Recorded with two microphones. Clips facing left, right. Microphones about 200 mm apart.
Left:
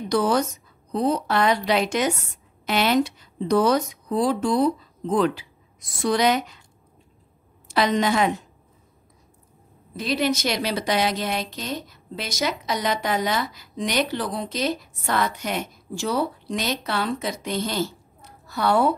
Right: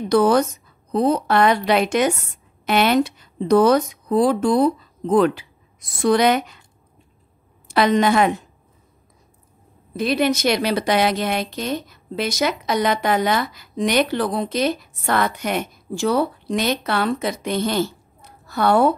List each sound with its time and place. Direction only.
0.1 s a woman's voice: 55° right (ahead or behind)
7.6 s a woman's voice: 60° right (ahead or behind)
9.9 s a woman's voice: 55° right (ahead or behind)